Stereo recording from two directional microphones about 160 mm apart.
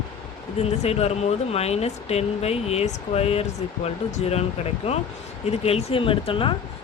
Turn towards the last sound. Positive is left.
turn(degrees=35)  # may be behind; listen again after turning